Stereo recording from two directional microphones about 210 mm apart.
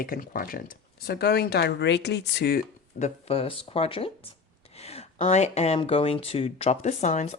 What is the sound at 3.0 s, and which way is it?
Speech, 30° left (ahead or behind).